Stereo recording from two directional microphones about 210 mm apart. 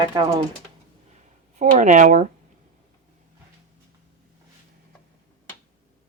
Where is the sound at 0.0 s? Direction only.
20° right (ahead or behind).